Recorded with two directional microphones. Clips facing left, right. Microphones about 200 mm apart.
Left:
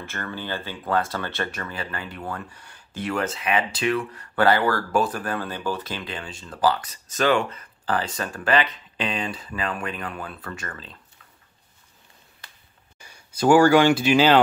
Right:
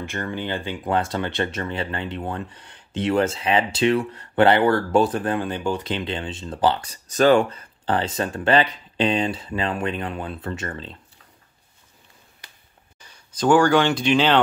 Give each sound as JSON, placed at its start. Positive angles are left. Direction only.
{"t": 0.0, "sound": "speech", "side_deg": -20}
{"t": 13.0, "sound": "speech", "side_deg": 10}